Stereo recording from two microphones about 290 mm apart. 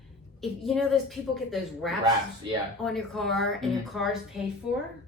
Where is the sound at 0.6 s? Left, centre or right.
Centre.